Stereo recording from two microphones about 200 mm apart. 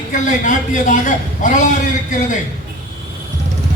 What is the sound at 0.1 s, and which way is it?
A man's voice, 40° left (ahead or behind).